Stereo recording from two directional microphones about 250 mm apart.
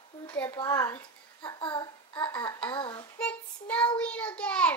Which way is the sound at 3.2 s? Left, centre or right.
Centre.